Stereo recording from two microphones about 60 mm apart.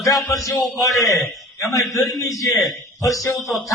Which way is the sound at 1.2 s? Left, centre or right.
Centre.